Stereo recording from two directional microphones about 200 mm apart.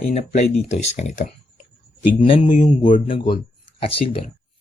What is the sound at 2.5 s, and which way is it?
Speech, 40° left (ahead or behind).